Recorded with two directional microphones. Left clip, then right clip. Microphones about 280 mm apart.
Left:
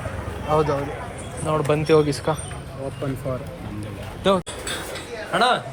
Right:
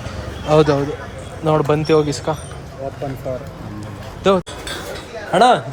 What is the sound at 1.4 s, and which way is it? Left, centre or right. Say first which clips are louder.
Speech: right 5 dB; centre.